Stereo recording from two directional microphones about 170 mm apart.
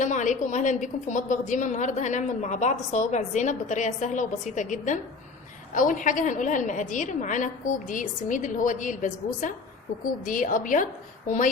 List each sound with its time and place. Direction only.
0.0 s a woman's voice: 45° left (ahead or behind)